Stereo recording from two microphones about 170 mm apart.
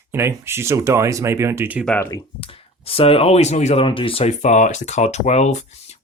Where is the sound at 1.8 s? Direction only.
5° left (ahead or behind).